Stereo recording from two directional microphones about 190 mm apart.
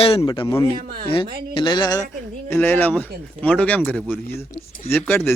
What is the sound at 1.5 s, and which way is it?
Speech, 25° left (ahead or behind).